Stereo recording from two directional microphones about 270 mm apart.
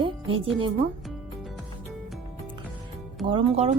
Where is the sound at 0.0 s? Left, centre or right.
Centre.